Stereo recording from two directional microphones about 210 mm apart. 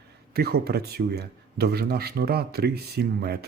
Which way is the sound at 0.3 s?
50° right (ahead or behind).